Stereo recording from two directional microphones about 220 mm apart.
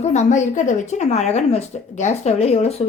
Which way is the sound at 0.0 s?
30° left (ahead or behind).